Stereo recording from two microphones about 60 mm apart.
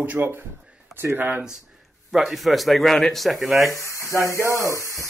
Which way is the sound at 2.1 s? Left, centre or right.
Centre.